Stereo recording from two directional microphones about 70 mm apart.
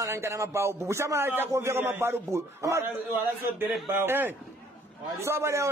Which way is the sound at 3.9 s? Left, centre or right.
Right.